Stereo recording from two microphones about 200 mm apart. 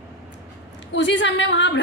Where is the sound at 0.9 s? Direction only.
65° left (ahead or behind).